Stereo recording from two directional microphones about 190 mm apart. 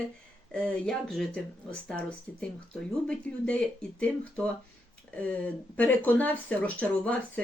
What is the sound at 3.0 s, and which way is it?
Speech, 5° left (ahead or behind).